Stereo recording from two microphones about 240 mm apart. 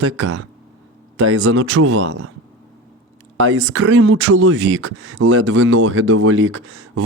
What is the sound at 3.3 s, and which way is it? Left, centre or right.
Speech, right.